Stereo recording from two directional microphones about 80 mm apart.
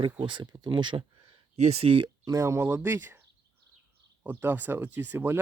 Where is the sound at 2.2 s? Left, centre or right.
Right.